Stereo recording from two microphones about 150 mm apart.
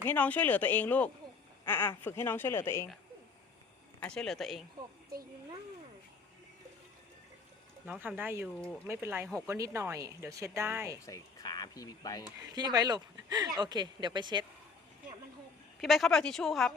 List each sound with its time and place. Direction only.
0.0 s a woman's voice: 10° left (ahead or behind)
4.0 s speech: 5° left (ahead or behind)
8.0 s speech: 15° right (ahead or behind)
11.0 s speech: 25° left (ahead or behind)
12.4 s speech: 25° right (ahead or behind)
15.8 s speech: centre (ahead or behind)